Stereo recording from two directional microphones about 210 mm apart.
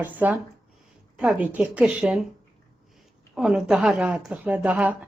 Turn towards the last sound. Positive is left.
turn(degrees=-5)  # may be behind; listen again after turning